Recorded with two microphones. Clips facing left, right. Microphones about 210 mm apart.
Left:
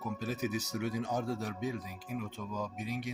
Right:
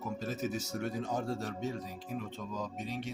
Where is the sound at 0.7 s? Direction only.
5° left (ahead or behind).